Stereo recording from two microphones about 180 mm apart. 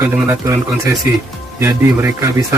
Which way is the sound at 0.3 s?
15° right (ahead or behind).